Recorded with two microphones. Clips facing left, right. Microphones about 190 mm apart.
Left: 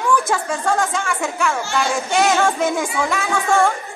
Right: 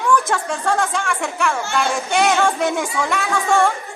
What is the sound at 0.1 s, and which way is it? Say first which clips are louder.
A woman's voice: right 1 dB; centre (ahead or behind).